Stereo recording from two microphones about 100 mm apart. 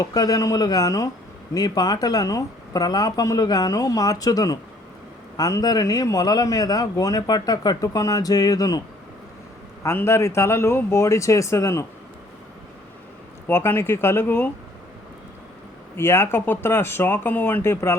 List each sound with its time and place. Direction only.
0.0 s a man's voice: 40° left (ahead or behind)
9.8 s a man's voice: 25° left (ahead or behind)
13.5 s a man's voice: 25° left (ahead or behind)
16.0 s a man's voice: 25° left (ahead or behind)